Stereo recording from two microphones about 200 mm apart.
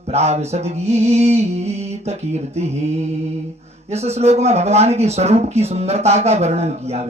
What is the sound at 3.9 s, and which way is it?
Speech, 30° right (ahead or behind).